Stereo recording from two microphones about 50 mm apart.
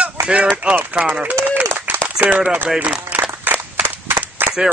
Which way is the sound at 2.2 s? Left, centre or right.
Right.